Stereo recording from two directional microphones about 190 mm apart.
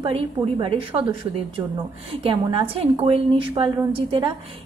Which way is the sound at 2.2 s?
30° right (ahead or behind).